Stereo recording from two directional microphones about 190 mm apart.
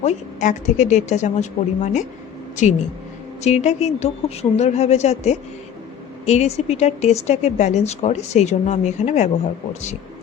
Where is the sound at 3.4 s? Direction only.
35° left (ahead or behind).